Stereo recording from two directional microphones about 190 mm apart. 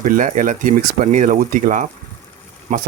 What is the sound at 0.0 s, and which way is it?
Speech, 45° right (ahead or behind).